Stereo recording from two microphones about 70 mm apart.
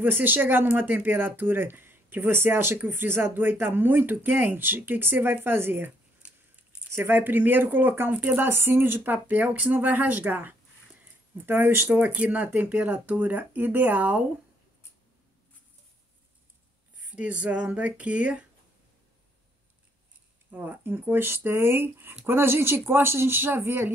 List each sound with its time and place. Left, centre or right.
0.0 s speech: right
7.0 s speech: right
17.1 s speech: centre
20.5 s speech: right